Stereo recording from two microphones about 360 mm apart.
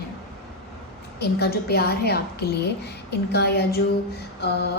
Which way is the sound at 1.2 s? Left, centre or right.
Left.